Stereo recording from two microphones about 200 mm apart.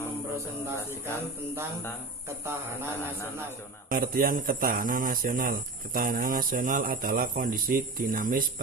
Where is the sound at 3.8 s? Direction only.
45° right (ahead or behind).